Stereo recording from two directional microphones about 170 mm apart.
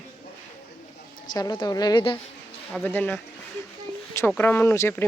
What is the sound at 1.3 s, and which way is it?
Speech, 25° left (ahead or behind).